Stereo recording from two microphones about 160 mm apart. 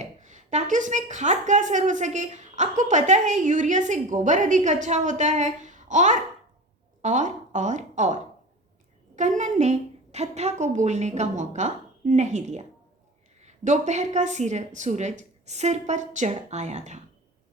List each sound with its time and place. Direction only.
0.0 s a woman's voice: 50° right (ahead or behind)
9.4 s a woman's voice: 45° right (ahead or behind)